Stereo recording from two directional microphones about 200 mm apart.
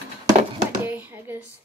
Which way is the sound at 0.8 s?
10° right (ahead or behind).